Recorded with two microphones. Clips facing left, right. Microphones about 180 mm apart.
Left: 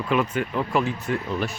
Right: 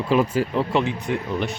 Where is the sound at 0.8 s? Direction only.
15° right (ahead or behind).